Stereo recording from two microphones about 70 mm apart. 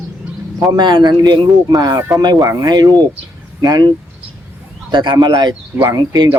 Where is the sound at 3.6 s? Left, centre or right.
Right.